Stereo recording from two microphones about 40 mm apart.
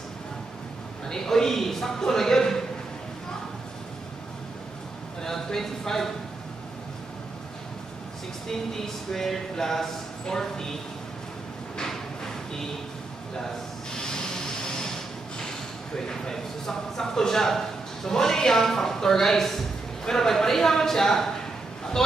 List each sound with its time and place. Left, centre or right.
1.0 s a man's voice: centre
5.2 s a man's voice: centre
8.5 s a man's voice: centre
13.9 s a sound: centre
16.0 s a man's voice: centre